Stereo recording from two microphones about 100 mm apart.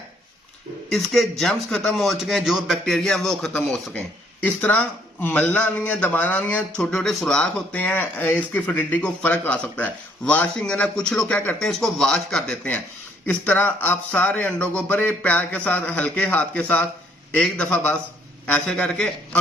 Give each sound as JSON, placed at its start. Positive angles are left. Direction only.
{"t": 0.9, "sound": "a man's voice", "side_deg": 5}
{"t": 4.4, "sound": "speech", "side_deg": 15}
{"t": 6.9, "sound": "speech", "side_deg": 5}